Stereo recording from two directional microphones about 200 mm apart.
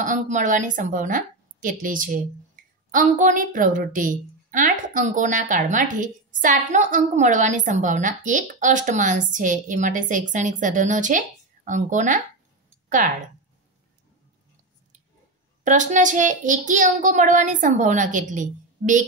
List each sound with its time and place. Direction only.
0.0 s a woman's voice: 40° right (ahead or behind)
15.6 s a woman's voice: 40° right (ahead or behind)